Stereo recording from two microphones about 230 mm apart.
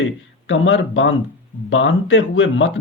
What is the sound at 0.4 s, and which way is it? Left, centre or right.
Speech, left.